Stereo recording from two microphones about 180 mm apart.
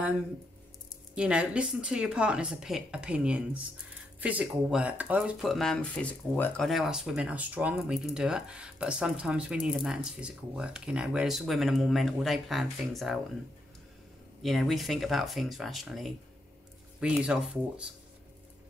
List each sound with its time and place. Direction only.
1.1 s speech: 5° right (ahead or behind)
14.4 s speech: centre (ahead or behind)